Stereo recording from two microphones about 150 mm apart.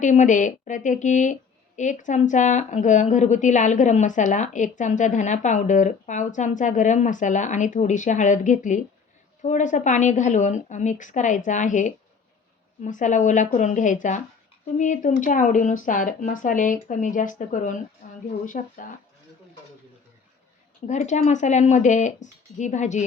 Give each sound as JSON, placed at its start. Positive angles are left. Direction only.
{"t": 0.0, "sound": "a woman's voice", "side_deg": 55}
{"t": 18.0, "sound": "a sound", "side_deg": 65}
{"t": 18.4, "sound": "a woman's voice", "side_deg": 65}
{"t": 20.8, "sound": "speech", "side_deg": 55}